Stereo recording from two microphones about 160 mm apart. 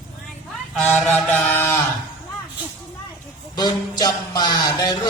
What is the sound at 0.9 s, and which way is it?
Mantra, 5° left (ahead or behind).